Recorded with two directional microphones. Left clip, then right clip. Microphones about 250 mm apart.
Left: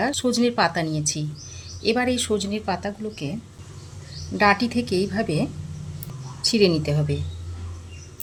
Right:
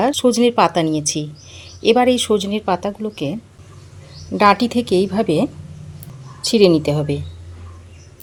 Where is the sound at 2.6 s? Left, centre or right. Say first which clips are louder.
Right 7 dB; right.